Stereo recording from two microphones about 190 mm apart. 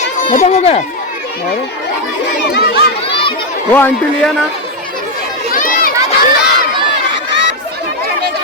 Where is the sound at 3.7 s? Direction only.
10° left (ahead or behind).